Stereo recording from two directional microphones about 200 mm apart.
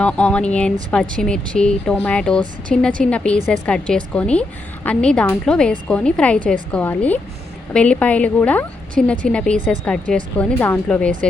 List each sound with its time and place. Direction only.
0.0 s a woman's voice: 5° left (ahead or behind)